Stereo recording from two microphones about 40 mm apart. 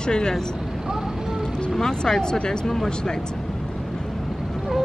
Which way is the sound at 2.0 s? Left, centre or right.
Centre.